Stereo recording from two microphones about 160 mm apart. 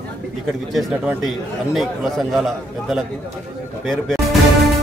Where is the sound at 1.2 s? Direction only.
Centre (ahead or behind).